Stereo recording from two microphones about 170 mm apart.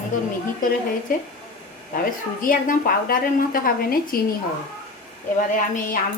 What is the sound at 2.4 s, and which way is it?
A woman's voice, 55° left (ahead or behind).